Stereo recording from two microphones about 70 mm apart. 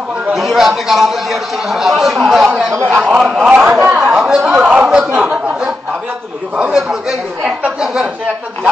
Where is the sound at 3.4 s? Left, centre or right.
Centre.